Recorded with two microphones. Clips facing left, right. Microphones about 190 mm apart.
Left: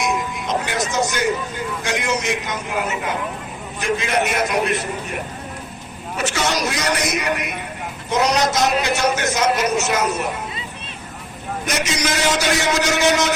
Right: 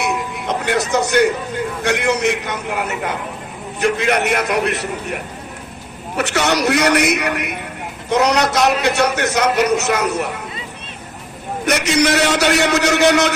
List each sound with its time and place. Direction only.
0.0 s music: 60° right (ahead or behind)
1.8 s a man's voice: 60° right (ahead or behind)
6.1 s a man's voice: 65° right (ahead or behind)
11.6 s a man's voice: 65° right (ahead or behind)